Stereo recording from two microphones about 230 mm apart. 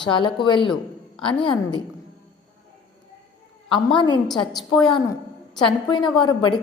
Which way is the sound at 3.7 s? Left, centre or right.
Centre.